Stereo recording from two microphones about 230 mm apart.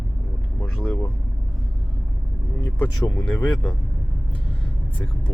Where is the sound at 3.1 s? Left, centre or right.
Centre.